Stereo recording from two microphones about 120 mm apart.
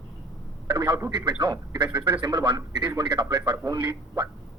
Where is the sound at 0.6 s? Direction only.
35° right (ahead or behind).